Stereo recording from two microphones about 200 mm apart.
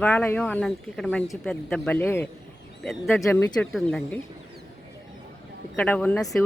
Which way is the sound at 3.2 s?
15° left (ahead or behind).